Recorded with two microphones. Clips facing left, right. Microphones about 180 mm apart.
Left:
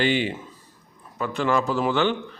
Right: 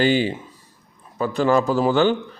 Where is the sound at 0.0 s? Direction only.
35° right (ahead or behind).